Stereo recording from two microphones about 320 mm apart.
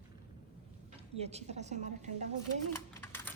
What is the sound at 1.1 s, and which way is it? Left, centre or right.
Speech, centre.